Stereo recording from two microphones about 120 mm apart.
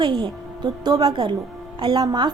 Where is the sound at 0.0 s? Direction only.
40° right (ahead or behind).